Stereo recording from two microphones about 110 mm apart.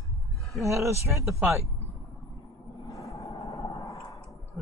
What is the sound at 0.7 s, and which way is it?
Speech, 25° right (ahead or behind).